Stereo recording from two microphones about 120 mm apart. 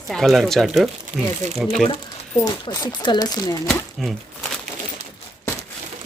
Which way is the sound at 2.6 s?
35° left (ahead or behind).